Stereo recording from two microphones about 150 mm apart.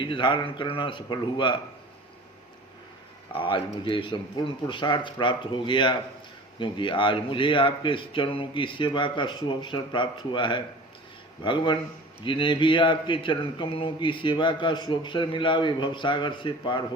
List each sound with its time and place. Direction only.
0.0 s a man's voice: 30° left (ahead or behind)
3.3 s a man's voice: 35° left (ahead or behind)